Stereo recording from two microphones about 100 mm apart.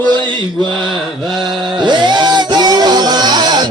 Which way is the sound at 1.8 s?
50° right (ahead or behind).